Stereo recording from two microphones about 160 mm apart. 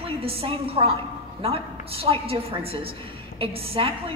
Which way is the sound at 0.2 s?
35° right (ahead or behind).